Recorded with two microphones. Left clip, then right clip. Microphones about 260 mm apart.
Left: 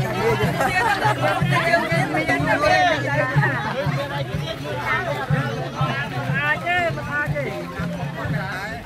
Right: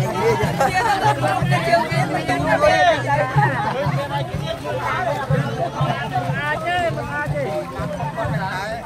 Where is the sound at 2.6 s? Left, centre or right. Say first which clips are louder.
Right 4 dB; right.